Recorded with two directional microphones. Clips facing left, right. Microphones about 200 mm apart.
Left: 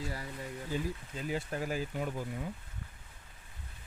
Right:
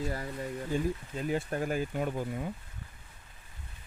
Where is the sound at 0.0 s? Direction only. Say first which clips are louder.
Right 5 dB; 50° right (ahead or behind).